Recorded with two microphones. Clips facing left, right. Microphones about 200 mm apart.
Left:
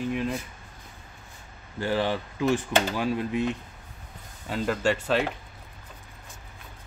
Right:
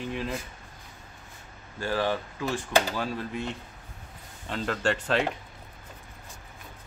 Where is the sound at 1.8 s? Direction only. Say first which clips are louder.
Left 2 dB; 20° left (ahead or behind).